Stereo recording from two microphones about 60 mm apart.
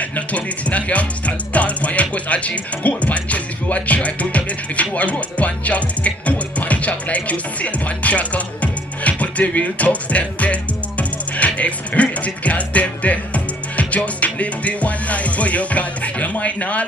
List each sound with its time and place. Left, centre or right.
0.1 s speech: left
9.0 s music: left